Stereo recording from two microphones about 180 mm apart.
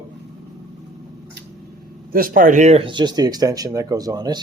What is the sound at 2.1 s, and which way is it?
Speech, 50° right (ahead or behind).